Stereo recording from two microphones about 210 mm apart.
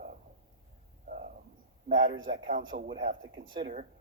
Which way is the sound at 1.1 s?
40° right (ahead or behind).